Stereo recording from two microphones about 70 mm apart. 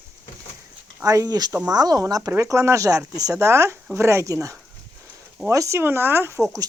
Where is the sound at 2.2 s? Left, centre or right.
Right.